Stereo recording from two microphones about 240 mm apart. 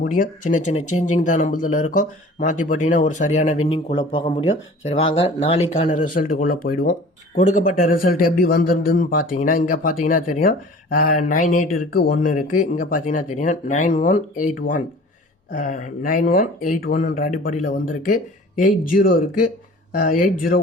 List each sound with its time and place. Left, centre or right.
0.0 s speech: left
15.5 s speech: left